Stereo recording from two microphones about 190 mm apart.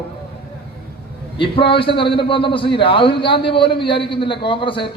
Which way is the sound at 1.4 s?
30° left (ahead or behind).